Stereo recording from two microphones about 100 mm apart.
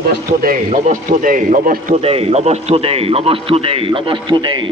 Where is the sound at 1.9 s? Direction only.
85° right; by 3.9 s 70° right (ahead or behind).